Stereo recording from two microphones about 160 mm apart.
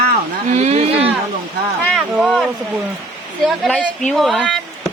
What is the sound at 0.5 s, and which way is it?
Speech, 45° right (ahead or behind).